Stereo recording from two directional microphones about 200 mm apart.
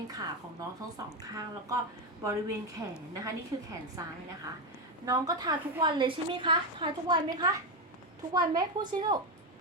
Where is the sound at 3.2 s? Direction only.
15° right (ahead or behind).